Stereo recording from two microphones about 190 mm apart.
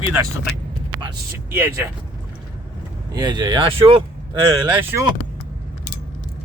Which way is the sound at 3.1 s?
20° right (ahead or behind).